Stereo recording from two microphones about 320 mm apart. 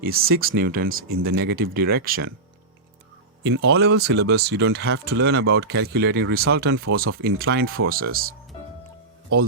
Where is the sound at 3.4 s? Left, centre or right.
Right.